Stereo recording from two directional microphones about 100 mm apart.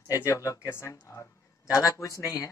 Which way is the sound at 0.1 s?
30° left (ahead or behind).